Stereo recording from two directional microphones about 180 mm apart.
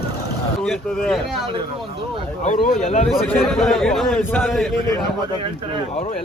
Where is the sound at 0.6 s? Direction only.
5° left (ahead or behind).